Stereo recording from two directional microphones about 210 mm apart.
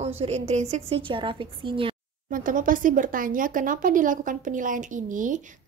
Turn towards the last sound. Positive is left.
turn(degrees=-40)  # may be behind; listen again after turning